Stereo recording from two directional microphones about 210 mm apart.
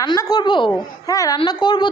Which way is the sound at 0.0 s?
20° left (ahead or behind).